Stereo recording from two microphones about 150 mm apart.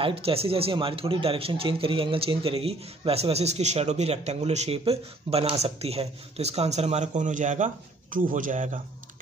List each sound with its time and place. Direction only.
0.0 s a man's voice: 40° right (ahead or behind); by 8.6 s 60° right (ahead or behind)